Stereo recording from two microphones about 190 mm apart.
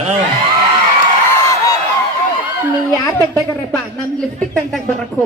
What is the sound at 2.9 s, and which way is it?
Speech, 15° left (ahead or behind).